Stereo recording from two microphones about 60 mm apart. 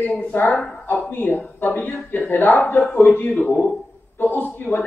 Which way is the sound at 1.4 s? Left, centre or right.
Left.